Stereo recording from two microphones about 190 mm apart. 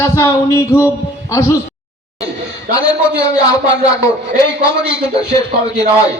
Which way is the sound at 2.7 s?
45° right (ahead or behind).